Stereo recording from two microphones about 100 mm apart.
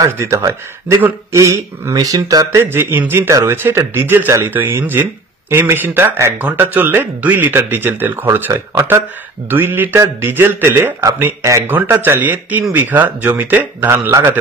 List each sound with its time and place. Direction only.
0.0 s speech: 30° right (ahead or behind)
2.6 s speech: 20° right (ahead or behind)